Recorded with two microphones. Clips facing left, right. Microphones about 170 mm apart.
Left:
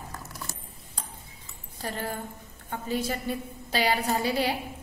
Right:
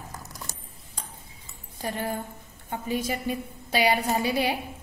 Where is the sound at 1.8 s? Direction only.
15° right (ahead or behind).